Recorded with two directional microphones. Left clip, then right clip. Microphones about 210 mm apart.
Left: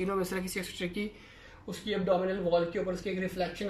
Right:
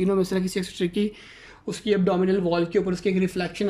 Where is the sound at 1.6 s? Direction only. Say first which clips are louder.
Right 7 dB; 50° right (ahead or behind).